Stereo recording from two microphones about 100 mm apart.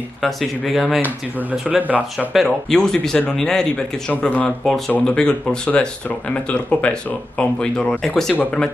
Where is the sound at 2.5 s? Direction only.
5° left (ahead or behind).